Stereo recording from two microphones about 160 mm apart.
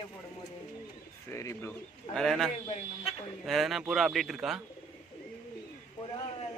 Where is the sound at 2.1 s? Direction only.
Centre (ahead or behind).